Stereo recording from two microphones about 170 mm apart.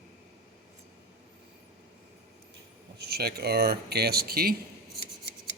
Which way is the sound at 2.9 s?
70° right (ahead or behind).